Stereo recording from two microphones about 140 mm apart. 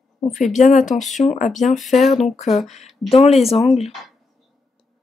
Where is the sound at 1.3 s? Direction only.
60° left (ahead or behind).